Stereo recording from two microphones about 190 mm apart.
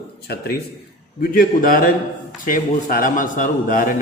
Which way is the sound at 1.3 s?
45° left (ahead or behind).